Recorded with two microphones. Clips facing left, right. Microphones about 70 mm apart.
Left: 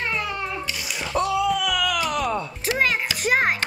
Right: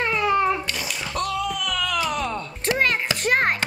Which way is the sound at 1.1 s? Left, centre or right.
Centre.